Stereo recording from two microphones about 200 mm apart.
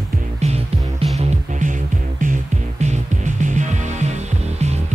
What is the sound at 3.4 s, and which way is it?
Music, 35° right (ahead or behind).